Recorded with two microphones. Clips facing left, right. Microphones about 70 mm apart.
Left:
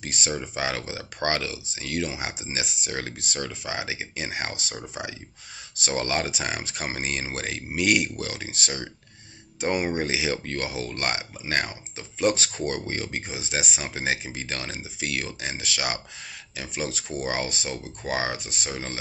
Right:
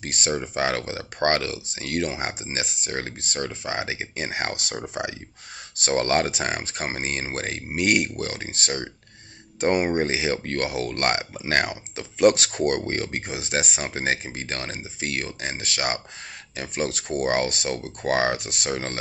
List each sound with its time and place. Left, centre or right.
0.0 s speech: right